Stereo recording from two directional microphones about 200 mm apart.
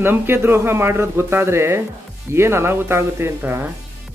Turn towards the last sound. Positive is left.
turn(degrees=-10)  # may be behind; listen again after turning